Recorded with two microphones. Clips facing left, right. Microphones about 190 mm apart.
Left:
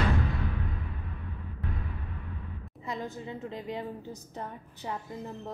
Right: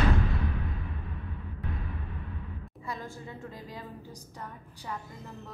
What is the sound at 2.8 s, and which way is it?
A woman's voice, 20° left (ahead or behind).